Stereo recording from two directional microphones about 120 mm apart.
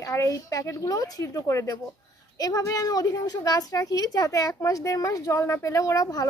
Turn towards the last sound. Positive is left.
turn(degrees=25)  # may be behind; listen again after turning